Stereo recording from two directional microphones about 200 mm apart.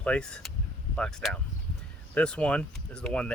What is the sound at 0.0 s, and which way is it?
Speech, 5° left (ahead or behind).